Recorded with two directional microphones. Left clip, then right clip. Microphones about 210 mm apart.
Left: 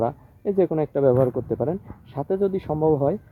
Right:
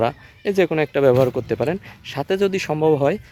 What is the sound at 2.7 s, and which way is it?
Speech, 30° right (ahead or behind).